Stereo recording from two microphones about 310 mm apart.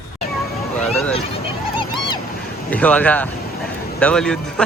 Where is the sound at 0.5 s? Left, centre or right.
Centre.